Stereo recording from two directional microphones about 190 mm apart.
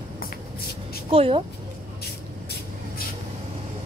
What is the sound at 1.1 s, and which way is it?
Speech, 30° right (ahead or behind).